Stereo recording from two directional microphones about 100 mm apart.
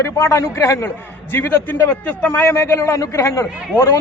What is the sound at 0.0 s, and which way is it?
A man's voice, 30° left (ahead or behind).